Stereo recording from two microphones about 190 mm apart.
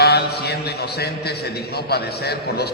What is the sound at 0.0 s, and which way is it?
A man's voice, 55° left (ahead or behind).